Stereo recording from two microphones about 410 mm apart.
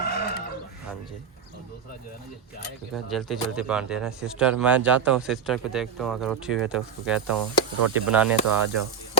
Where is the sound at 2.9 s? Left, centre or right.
Centre.